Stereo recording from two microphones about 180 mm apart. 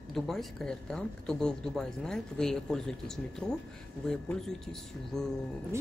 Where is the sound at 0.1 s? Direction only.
Centre (ahead or behind).